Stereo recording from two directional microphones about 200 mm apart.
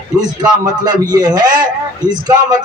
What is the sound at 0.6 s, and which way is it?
A man's voice, 20° right (ahead or behind).